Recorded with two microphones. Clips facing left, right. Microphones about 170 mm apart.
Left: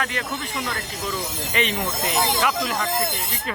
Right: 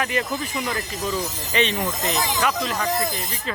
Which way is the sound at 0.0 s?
5° right (ahead or behind).